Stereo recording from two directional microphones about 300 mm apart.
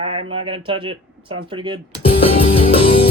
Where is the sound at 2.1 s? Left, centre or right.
Centre.